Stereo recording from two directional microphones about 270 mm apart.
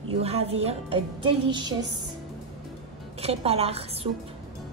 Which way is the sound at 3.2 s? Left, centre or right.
Right.